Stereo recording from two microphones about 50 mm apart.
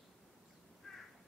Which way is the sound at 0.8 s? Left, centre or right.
Centre.